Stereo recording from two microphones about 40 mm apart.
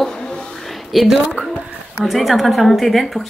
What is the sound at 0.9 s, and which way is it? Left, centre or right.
A woman's voice, centre.